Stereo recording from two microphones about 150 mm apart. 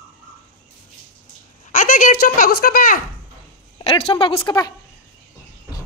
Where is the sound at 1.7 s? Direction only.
80° left.